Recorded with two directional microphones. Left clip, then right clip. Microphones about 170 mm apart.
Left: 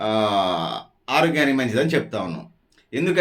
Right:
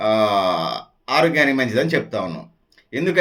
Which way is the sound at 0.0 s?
5° right (ahead or behind).